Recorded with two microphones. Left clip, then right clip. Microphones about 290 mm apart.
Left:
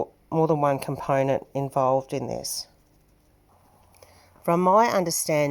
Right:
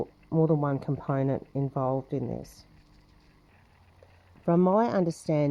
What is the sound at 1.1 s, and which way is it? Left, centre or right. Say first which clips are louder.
Speech: left 8 dB; left.